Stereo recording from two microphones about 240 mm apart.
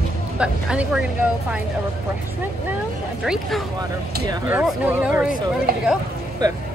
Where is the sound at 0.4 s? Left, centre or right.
Centre.